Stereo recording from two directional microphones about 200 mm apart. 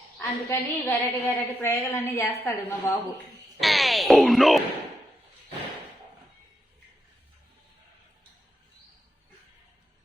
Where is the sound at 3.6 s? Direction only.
Centre (ahead or behind).